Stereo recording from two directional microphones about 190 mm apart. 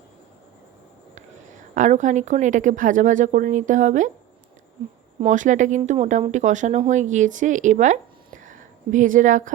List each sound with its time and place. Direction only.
1.7 s speech: 40° right (ahead or behind)
5.2 s speech: 40° right (ahead or behind)